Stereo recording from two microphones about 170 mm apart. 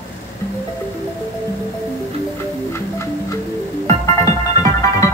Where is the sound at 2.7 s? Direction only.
15° left (ahead or behind).